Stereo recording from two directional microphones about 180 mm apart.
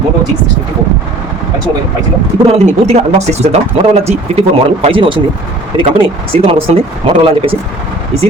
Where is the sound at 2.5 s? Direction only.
35° right (ahead or behind).